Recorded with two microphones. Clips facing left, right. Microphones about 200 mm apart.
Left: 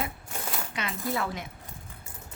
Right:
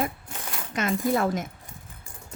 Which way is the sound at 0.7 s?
45° right (ahead or behind).